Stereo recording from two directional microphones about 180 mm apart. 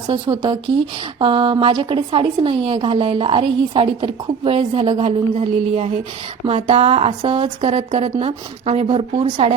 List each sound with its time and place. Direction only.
0.1 s a woman's voice: 25° right (ahead or behind)